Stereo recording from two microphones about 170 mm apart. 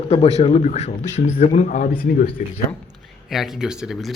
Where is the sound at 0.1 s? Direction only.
35° left (ahead or behind).